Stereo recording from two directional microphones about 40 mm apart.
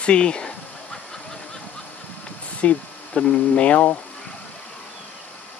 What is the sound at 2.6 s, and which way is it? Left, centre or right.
Speech, left.